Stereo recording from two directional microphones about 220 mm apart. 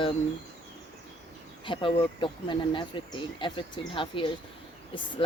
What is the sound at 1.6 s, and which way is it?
Speech, 20° left (ahead or behind).